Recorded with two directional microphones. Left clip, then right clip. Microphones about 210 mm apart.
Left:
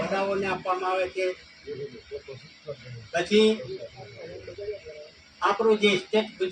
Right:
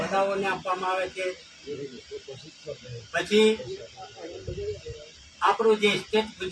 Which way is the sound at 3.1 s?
15° right (ahead or behind).